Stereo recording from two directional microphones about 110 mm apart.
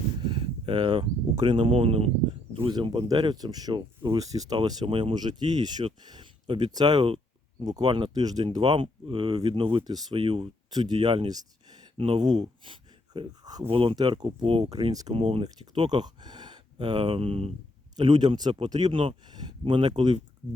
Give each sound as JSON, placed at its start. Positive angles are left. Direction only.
{"t": 0.2, "sound": "a sound", "side_deg": -50}
{"t": 1.4, "sound": "speech", "side_deg": -50}
{"t": 2.6, "sound": "speech", "side_deg": -45}
{"t": 4.9, "sound": "speech", "side_deg": -55}
{"t": 8.2, "sound": "speech", "side_deg": -35}
{"t": 11.9, "sound": "speech", "side_deg": -55}
{"t": 12.6, "sound": "a sound", "side_deg": -50}
{"t": 13.4, "sound": "speech", "side_deg": -35}
{"t": 13.7, "sound": "speech", "side_deg": -55}
{"t": 13.9, "sound": "speech", "side_deg": -40}
{"t": 15.1, "sound": "speech", "side_deg": -60}
{"t": 15.7, "sound": "speech", "side_deg": -45}
{"t": 17.9, "sound": "speech", "side_deg": -40}